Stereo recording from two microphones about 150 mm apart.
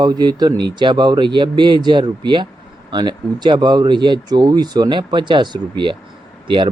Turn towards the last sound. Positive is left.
turn(degrees=-35)  # may be behind; listen again after turning